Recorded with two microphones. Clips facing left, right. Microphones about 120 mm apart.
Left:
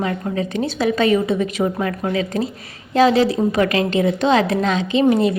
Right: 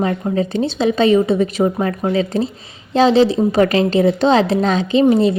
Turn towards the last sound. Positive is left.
turn(degrees=-30)  # may be behind; listen again after turning